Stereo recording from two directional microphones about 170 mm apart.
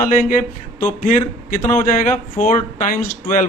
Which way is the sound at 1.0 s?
50° left (ahead or behind).